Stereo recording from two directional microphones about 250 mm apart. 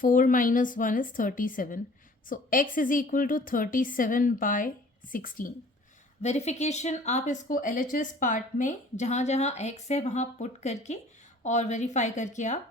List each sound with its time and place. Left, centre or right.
0.0 s a woman's voice: left